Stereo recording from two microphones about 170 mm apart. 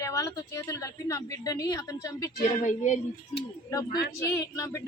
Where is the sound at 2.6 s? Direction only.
45° left (ahead or behind).